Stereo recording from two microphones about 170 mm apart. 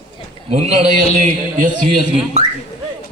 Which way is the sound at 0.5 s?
40° right (ahead or behind).